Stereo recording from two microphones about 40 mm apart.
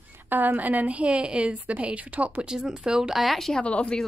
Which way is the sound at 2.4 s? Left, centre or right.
Centre.